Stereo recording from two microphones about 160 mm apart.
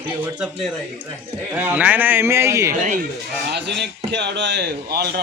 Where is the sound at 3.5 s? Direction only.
90° right.